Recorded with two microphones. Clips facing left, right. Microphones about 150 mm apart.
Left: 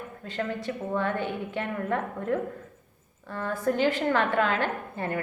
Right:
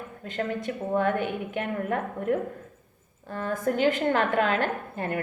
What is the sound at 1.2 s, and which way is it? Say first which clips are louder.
Speech: right 1 dB; 15° right (ahead or behind).